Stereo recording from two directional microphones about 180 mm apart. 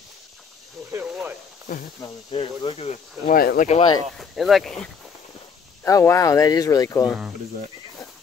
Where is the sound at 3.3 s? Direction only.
50° left (ahead or behind).